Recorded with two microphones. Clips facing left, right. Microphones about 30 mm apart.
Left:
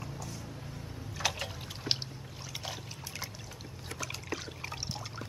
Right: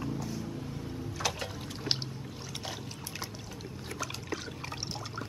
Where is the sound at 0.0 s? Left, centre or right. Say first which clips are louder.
Right 7 dB; centre.